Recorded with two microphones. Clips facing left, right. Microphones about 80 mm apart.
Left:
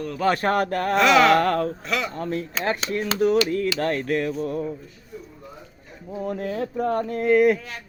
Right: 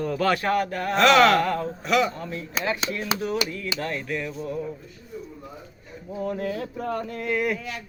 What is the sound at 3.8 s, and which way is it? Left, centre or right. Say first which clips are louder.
Speech: left 6 dB; left.